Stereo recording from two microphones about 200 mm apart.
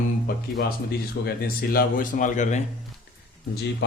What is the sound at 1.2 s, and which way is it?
Speech, 50° left (ahead or behind).